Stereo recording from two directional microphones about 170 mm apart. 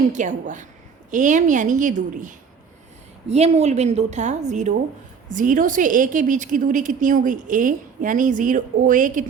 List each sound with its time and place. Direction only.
0.1 s a woman's voice: 50° right (ahead or behind)